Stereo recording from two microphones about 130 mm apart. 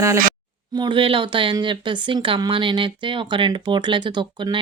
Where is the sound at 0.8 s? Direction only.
40° right (ahead or behind).